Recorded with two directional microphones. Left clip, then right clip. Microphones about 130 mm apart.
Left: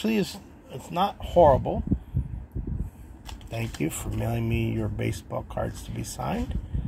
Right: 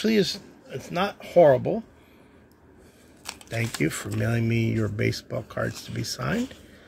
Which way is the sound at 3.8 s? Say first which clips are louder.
Right 3 dB; 55° right (ahead or behind).